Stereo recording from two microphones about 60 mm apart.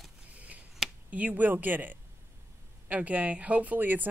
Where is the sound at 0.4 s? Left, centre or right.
Right.